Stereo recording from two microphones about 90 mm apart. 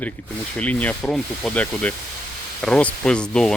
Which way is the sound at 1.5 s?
15° left (ahead or behind).